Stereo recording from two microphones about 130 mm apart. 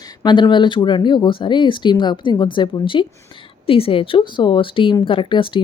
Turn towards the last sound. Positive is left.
turn(degrees=40)  # may be behind; listen again after turning